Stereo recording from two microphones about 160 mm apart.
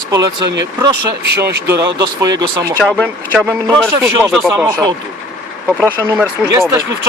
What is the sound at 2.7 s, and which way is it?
Speech, 5° left (ahead or behind).